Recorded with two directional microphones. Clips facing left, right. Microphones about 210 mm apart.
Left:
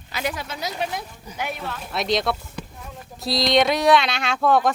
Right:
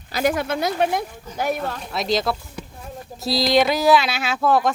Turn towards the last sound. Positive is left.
turn(degrees=0)  # may be behind; listen again after turning